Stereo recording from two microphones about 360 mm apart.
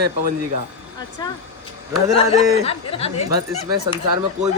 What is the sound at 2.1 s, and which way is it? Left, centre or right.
Speech, centre.